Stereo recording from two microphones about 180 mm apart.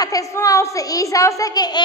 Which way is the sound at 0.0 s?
20° left (ahead or behind).